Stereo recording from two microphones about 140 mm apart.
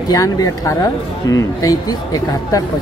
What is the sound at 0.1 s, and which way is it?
Speech, 25° left (ahead or behind).